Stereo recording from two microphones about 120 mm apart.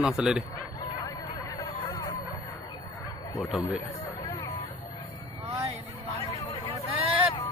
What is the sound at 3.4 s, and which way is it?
Speech, 5° right (ahead or behind).